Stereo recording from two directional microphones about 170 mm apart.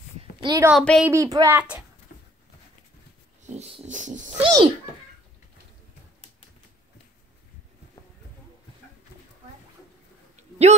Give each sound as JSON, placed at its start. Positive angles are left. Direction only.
{"t": 0.2, "sound": "a sound", "side_deg": -25}
{"t": 0.7, "sound": "speech", "side_deg": 0}
{"t": 1.0, "sound": "speech", "side_deg": -20}
{"t": 1.6, "sound": "a child's voice", "side_deg": -10}
{"t": 3.4, "sound": "pig", "side_deg": -40}
{"t": 4.4, "sound": "a sound", "side_deg": -25}